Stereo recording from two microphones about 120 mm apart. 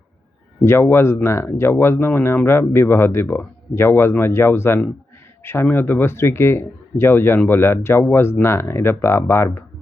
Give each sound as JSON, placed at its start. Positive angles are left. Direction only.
{"t": 0.6, "sound": "speech", "side_deg": 20}